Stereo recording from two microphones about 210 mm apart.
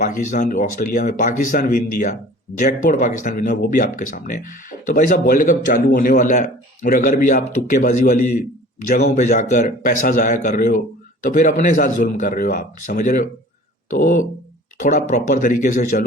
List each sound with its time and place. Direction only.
0.0 s a man's voice: 35° left (ahead or behind)
9.1 s a man's voice: 35° left (ahead or behind)